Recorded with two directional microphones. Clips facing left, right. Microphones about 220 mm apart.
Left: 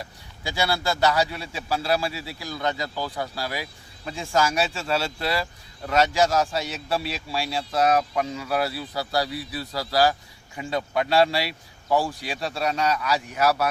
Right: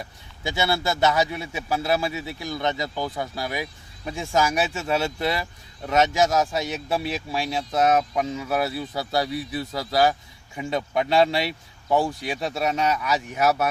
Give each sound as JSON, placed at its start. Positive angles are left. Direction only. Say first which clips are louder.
{"t": 0.4, "sound": "a man's voice", "louder": "right 1 dB", "side_deg": -20}